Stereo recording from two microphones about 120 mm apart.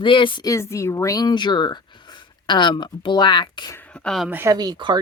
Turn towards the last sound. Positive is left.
turn(degrees=-40)  # may be behind; listen again after turning